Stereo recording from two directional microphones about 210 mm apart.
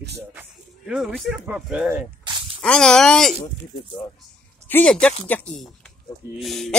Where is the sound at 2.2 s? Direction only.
20° right (ahead or behind).